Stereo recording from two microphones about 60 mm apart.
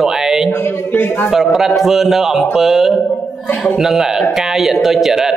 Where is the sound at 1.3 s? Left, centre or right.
Centre.